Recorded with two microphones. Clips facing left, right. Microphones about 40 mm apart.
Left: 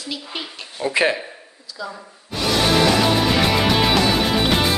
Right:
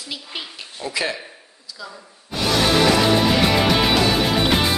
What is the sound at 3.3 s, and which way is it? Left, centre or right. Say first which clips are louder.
Music: even; centre.